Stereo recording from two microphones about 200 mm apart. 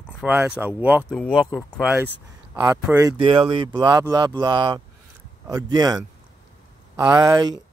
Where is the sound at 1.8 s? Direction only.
10° right (ahead or behind).